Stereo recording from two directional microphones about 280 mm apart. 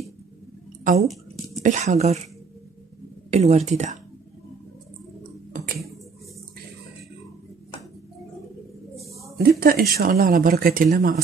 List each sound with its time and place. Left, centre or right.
1.0 s a sound: centre
1.6 s speech: right
3.3 s speech: right
8.9 s speech: right